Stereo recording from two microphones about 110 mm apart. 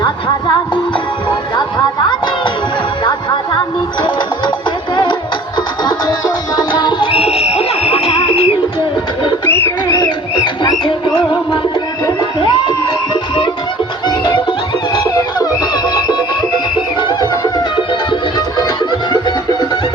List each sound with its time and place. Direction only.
1.5 s music: 40° left (ahead or behind)
5.8 s music: 35° left (ahead or behind); by 8.5 s 65° left (ahead or behind)
9.5 s a sound: 20° left (ahead or behind)
9.9 s music: 40° left (ahead or behind)
14.1 s music: 45° left (ahead or behind)